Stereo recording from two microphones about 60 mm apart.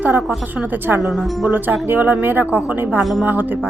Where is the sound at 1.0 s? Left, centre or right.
Centre.